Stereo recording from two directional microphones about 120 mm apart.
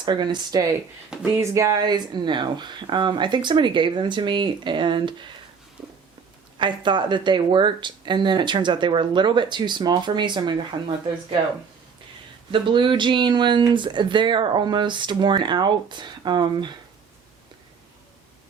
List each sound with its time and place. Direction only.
0.0 s speech: 40° right (ahead or behind)
5.8 s a sound: centre (ahead or behind)
6.6 s speech: 40° right (ahead or behind)
12.5 s speech: 45° right (ahead or behind)